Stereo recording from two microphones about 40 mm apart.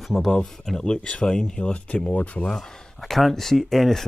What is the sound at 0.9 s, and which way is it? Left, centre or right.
Speech, left.